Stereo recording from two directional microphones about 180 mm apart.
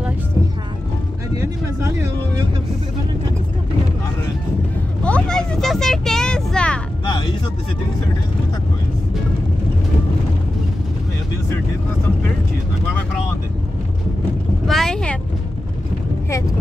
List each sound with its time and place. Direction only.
1.3 s a sound: 15° right (ahead or behind)
5.0 s vehicle: 5° left (ahead or behind)
7.1 s speech: 20° left (ahead or behind)
14.7 s vehicle: centre (ahead or behind)